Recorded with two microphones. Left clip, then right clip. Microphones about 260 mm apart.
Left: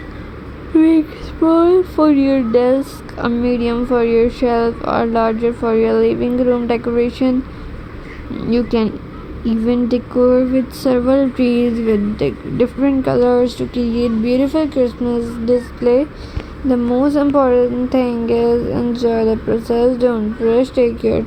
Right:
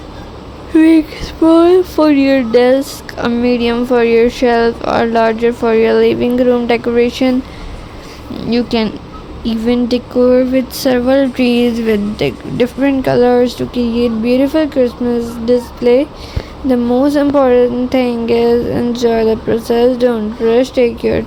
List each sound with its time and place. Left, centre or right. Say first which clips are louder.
1.5 s speech: right 4 dB; right